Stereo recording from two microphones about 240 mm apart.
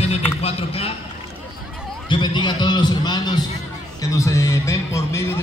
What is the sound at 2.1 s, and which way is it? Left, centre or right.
A man's voice, centre.